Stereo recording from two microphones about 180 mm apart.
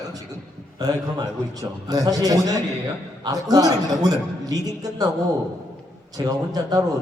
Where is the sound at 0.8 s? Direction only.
20° right (ahead or behind).